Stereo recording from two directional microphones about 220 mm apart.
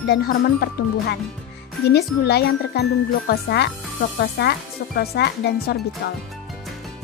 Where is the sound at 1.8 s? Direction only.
45° left (ahead or behind).